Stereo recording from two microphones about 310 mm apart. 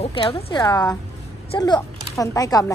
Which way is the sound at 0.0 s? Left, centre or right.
Centre.